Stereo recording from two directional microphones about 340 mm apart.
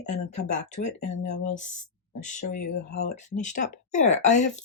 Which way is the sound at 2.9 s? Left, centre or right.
Left.